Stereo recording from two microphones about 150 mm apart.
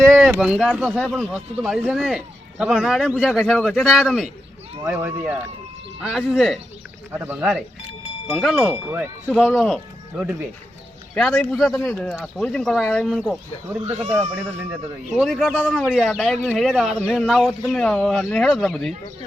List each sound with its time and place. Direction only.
0.0 s a sound: 15° right (ahead or behind)
0.3 s speech: 5° right (ahead or behind)
4.9 s speech: 15° right (ahead or behind)
6.0 s speech: 5° right (ahead or behind)
7.1 s speech: 15° right (ahead or behind)
8.7 s speech: 15° right (ahead or behind)
9.5 s speech: centre (ahead or behind)
11.1 s speech: 5° left (ahead or behind)
13.8 s speech: 50° right (ahead or behind)
14.3 s speech: 20° right (ahead or behind)
15.1 s speech: centre (ahead or behind)